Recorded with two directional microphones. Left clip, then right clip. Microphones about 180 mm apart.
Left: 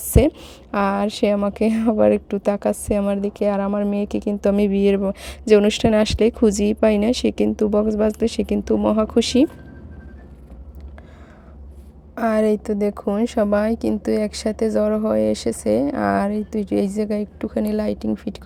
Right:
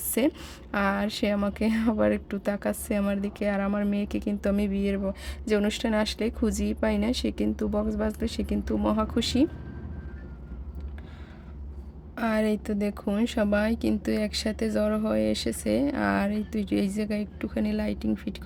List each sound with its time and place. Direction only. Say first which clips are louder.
0.1 s a woman's voice: left 9 dB; 30° left (ahead or behind)
12.1 s a woman's voice: left 8 dB; 25° left (ahead or behind)